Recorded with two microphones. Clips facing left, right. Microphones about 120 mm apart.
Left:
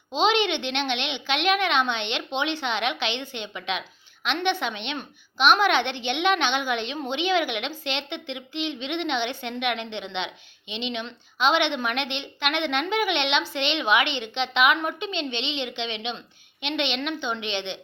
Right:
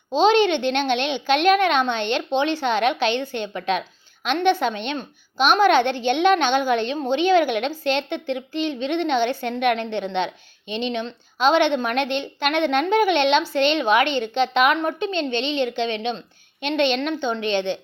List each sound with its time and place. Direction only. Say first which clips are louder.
0.1 s a woman's voice: right 6 dB; 35° right (ahead or behind)